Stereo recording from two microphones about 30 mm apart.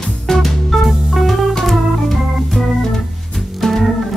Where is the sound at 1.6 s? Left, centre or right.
Centre.